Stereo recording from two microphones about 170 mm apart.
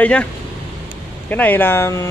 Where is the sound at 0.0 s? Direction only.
10° left (ahead or behind).